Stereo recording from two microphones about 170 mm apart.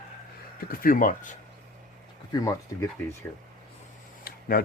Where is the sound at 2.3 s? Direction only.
20° left (ahead or behind).